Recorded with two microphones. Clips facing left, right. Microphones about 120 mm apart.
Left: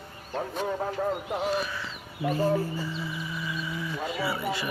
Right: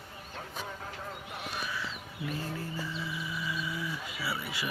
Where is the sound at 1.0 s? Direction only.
65° left (ahead or behind).